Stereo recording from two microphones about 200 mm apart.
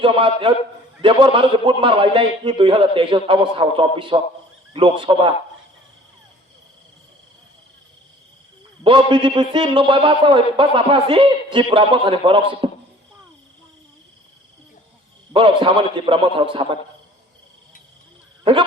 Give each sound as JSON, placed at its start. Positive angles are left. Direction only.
{"t": 0.0, "sound": "a man's voice", "side_deg": -25}
{"t": 8.8, "sound": "a man's voice", "side_deg": -25}
{"t": 15.3, "sound": "a man's voice", "side_deg": -25}